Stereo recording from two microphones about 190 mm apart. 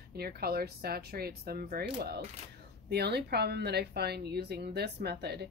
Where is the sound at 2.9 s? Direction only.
60° right (ahead or behind).